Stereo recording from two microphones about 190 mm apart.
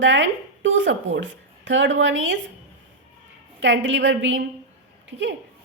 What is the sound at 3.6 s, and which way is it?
A woman's voice, 70° right (ahead or behind).